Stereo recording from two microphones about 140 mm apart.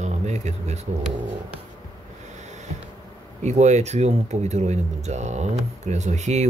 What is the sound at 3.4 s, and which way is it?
Speech, 55° right (ahead or behind).